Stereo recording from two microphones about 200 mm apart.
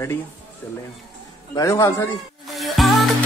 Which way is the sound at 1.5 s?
15° left (ahead or behind).